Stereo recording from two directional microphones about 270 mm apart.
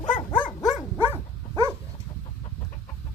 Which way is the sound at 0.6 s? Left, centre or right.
Centre.